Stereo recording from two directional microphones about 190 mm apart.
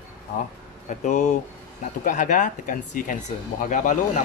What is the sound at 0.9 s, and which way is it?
Speech, 40° left (ahead or behind).